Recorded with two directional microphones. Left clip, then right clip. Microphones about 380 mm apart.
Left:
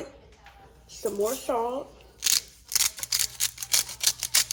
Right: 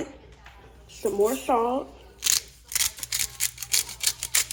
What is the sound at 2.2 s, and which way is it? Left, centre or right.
Scissors, centre.